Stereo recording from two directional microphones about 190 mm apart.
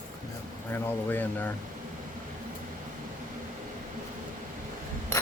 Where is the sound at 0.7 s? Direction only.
10° left (ahead or behind).